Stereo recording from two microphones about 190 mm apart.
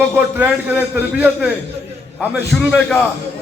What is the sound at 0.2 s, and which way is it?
A man's voice, 10° right (ahead or behind).